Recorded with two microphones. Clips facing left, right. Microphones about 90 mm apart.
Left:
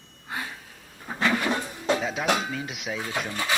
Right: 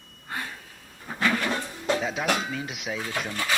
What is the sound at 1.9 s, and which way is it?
A woman's voice, centre (ahead or behind).